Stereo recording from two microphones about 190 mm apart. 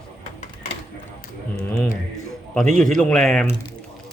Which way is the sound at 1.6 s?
10° left (ahead or behind).